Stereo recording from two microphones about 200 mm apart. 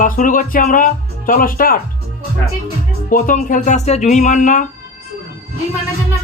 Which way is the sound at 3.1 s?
40° left (ahead or behind).